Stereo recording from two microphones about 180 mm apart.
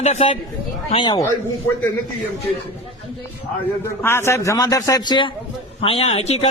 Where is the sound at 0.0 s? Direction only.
40° left (ahead or behind).